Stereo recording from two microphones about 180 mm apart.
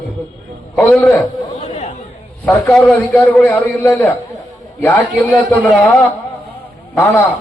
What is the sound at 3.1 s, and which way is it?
A man's voice, 10° left (ahead or behind).